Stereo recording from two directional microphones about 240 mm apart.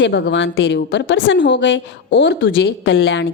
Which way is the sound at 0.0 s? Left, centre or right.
Left.